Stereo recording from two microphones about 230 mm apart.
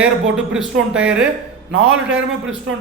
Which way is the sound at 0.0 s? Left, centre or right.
Centre.